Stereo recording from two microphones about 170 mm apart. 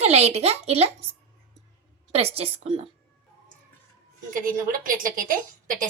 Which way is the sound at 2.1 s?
35° right (ahead or behind).